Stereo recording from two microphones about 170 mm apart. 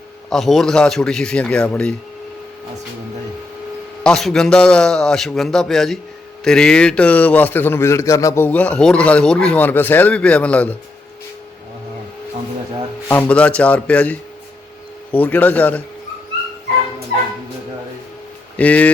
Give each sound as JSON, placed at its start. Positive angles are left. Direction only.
{"t": 0.3, "sound": "a man's voice", "side_deg": 0}
{"t": 4.0, "sound": "a man's voice", "side_deg": 5}
{"t": 13.1, "sound": "a man's voice", "side_deg": 10}
{"t": 18.5, "sound": "speech", "side_deg": 10}